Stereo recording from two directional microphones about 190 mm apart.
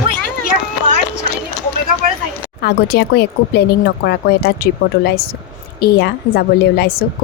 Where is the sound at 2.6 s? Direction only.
60° left (ahead or behind).